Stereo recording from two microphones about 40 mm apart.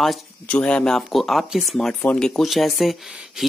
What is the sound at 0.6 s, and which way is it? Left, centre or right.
Speech, left.